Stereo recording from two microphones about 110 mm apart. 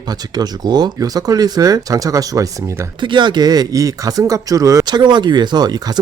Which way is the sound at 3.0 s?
45° right (ahead or behind).